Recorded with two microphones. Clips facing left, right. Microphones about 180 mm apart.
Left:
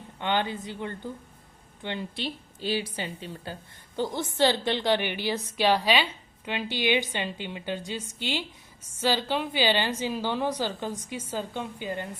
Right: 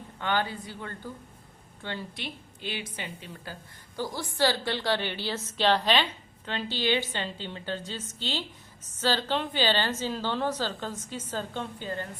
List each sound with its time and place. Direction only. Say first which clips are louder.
0.2 s a woman's voice: left 2 dB; 20° left (ahead or behind)
2.2 s a woman's voice: left 6 dB; 35° left (ahead or behind); by 12.0 s 15° left (ahead or behind)